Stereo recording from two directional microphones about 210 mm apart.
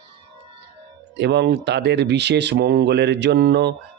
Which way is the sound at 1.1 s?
55° right (ahead or behind).